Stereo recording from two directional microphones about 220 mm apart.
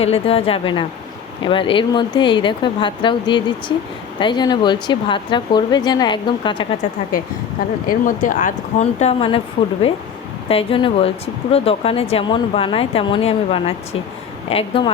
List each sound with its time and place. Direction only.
0.0 s speech: 25° left (ahead or behind)
7.9 s speech: 40° left (ahead or behind)
10.5 s speech: 25° left (ahead or behind)